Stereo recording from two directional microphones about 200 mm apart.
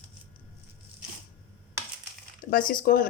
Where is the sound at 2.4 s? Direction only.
45° left (ahead or behind).